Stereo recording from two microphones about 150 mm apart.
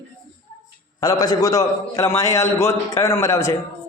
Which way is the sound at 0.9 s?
25° left (ahead or behind).